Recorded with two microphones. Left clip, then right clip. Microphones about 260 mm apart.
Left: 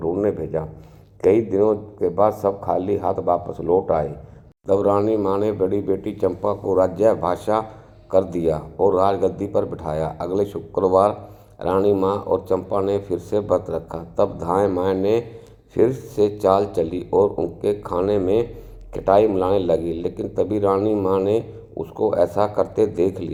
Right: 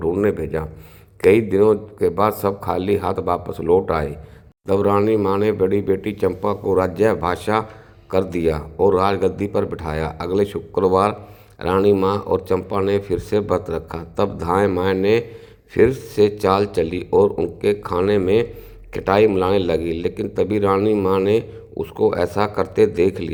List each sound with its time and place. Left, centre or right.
0.0 s a man's voice: right